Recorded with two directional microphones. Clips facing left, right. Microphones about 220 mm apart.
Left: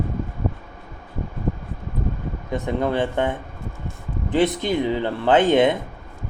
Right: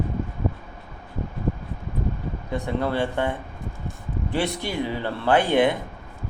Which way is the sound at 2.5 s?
20° left (ahead or behind).